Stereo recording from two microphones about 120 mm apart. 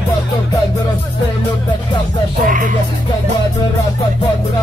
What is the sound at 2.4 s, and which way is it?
Speech, 90° right.